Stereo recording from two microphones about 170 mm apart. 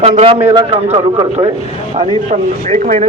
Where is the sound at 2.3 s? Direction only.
50° right (ahead or behind).